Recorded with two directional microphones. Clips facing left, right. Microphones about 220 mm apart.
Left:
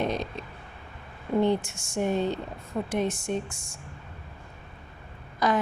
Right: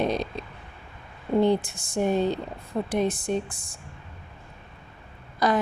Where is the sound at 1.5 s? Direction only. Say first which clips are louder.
Right 2 dB; 35° right (ahead or behind).